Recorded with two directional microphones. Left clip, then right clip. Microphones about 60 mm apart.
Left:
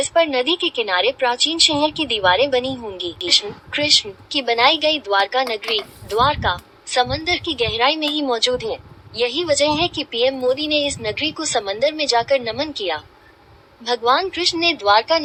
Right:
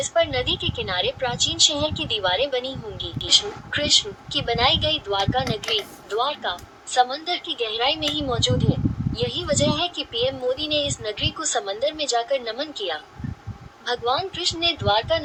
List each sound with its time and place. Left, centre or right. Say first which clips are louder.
0.2 s a woman's voice: left 4 dB; left
3.7 s speech: left 4 dB; left